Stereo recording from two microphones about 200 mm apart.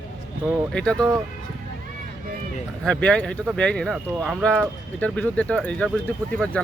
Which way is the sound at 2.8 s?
5° left (ahead or behind).